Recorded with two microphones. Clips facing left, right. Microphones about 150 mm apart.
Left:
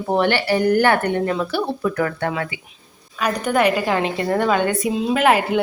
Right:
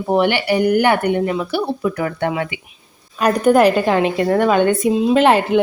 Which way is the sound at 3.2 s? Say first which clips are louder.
Right 6 dB; 45° right (ahead or behind).